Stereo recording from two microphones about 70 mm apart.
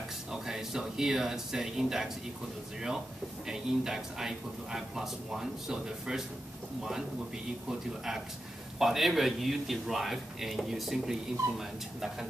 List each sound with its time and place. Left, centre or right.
0.3 s speech: centre
3.4 s speech: centre
7.6 s a man's voice: centre